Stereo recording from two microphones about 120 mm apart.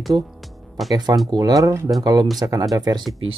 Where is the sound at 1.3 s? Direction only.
30° right (ahead or behind).